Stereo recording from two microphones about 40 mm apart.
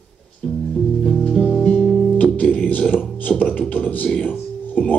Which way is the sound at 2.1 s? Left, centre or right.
Left.